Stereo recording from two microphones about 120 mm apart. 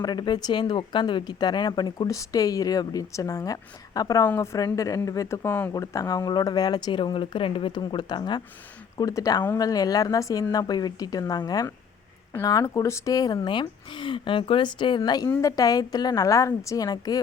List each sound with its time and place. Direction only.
0.0 s speech: 35° left (ahead or behind); by 5.7 s 15° left (ahead or behind)
5.7 s speech: 30° left (ahead or behind)